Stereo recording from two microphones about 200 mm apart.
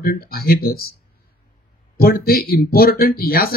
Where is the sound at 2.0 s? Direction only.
50° left (ahead or behind).